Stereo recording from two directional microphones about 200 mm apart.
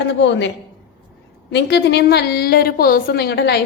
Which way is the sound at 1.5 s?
60° left (ahead or behind).